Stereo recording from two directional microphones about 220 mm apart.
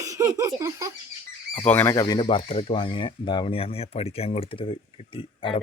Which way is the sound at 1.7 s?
10° left (ahead or behind).